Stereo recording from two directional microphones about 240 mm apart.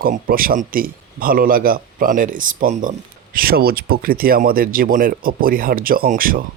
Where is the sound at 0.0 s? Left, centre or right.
Right.